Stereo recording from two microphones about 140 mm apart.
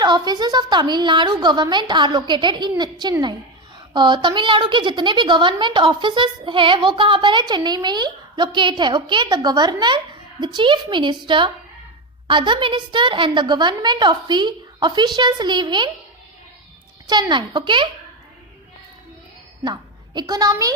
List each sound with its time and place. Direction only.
0.0 s a woman's voice: 30° right (ahead or behind)
17.1 s a woman's voice: 30° right (ahead or behind)
19.6 s a woman's voice: 30° right (ahead or behind)